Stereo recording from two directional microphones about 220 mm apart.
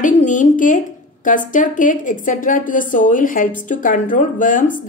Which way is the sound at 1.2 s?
35° left (ahead or behind).